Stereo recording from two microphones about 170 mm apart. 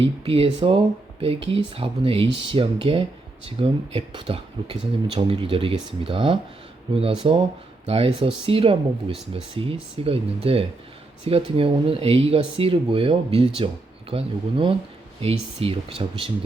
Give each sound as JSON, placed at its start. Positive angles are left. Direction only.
{"t": 0.0, "sound": "speech", "side_deg": -35}